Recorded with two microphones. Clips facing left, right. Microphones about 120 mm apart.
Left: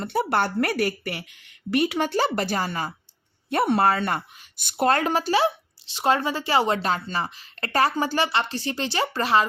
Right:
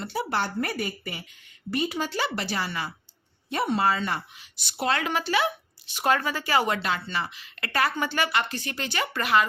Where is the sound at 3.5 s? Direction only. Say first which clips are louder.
Left 4 dB; 60° left (ahead or behind); by 6.8 s 30° left (ahead or behind).